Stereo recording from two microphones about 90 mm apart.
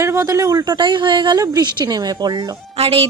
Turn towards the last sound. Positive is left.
turn(degrees=-90)